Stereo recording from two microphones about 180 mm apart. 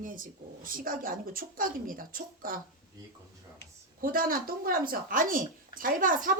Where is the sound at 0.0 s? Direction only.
50° right (ahead or behind).